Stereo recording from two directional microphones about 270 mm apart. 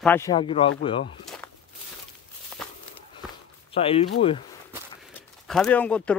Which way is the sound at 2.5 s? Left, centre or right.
Centre.